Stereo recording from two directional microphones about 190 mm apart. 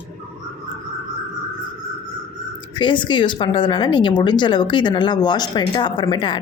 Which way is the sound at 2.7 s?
25° left (ahead or behind).